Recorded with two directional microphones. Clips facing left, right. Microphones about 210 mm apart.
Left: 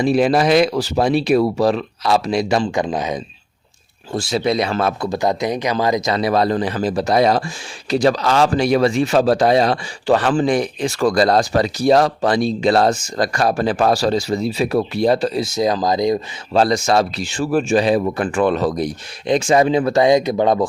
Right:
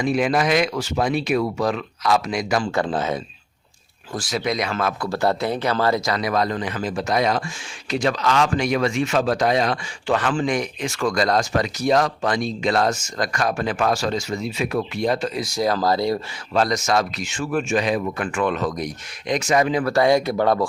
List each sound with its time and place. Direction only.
0.0 s speech: 35° left (ahead or behind)
2.7 s speech: 15° left (ahead or behind)
4.1 s speech: 30° left (ahead or behind)
5.0 s speech: 15° left (ahead or behind)
6.1 s speech: 30° left (ahead or behind)
16.5 s speech: 30° left (ahead or behind)